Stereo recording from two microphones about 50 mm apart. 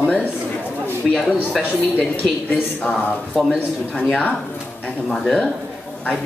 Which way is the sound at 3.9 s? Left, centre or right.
Left.